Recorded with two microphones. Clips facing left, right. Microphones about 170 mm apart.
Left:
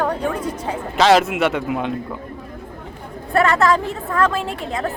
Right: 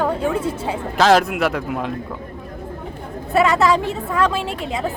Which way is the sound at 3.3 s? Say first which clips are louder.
Right 1 dB; 5° right (ahead or behind).